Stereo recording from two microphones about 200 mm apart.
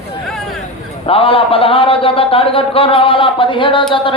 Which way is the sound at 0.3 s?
Centre (ahead or behind).